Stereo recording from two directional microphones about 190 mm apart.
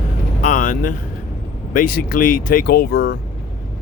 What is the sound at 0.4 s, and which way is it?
Vehicle, 40° left (ahead or behind).